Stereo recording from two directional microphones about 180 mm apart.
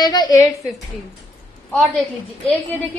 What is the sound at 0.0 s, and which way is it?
Speech, 20° left (ahead or behind).